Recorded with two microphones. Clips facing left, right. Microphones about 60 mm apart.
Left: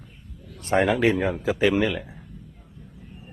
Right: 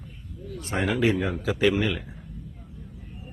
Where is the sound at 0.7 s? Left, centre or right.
Left.